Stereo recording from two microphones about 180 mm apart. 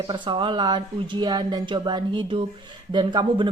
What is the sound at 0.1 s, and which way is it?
Speech, 25° right (ahead or behind).